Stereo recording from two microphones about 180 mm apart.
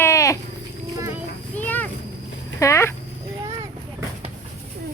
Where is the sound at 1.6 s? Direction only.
10° left (ahead or behind).